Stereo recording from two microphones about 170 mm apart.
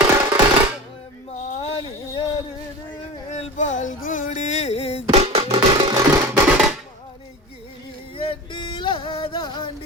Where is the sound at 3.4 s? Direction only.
45° left (ahead or behind).